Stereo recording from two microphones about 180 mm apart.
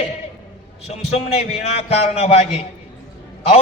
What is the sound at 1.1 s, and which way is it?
A man's voice, 35° left (ahead or behind).